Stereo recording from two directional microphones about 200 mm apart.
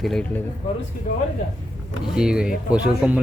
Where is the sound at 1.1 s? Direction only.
40° left (ahead or behind).